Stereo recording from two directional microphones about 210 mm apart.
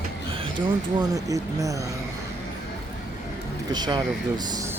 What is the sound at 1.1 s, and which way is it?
Speech, 15° right (ahead or behind).